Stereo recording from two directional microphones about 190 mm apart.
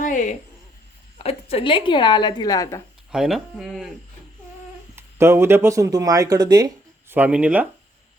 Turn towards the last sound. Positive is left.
turn(degrees=-5)  # may be behind; listen again after turning